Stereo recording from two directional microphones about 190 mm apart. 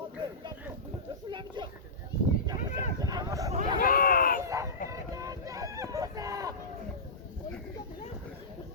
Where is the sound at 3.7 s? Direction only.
50° left (ahead or behind).